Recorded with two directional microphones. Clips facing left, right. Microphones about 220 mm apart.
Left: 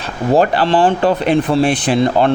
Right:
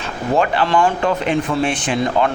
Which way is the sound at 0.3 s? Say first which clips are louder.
Left 3 dB; 35° left (ahead or behind).